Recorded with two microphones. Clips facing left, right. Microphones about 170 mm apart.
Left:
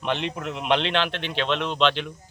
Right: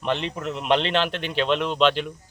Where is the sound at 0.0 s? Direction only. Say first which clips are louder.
Right 1 dB; centre (ahead or behind).